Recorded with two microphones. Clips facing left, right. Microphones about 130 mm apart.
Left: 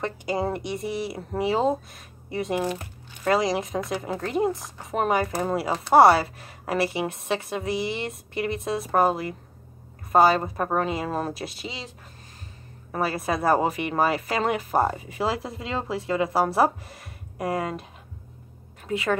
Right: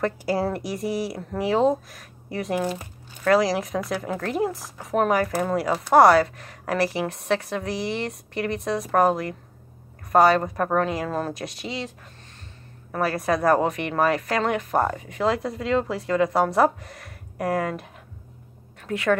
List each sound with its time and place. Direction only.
0.6 s a woman's voice: centre (ahead or behind)
5.2 s speech: 20° left (ahead or behind)
6.1 s a woman's voice: 5° left (ahead or behind)
13.5 s a woman's voice: 5° left (ahead or behind)
14.8 s speech: 25° left (ahead or behind)
15.0 s a woman's voice: 5° left (ahead or behind)
18.9 s a woman's voice: centre (ahead or behind)